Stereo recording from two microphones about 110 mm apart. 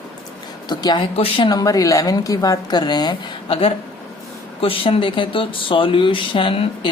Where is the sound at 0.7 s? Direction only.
40° left (ahead or behind).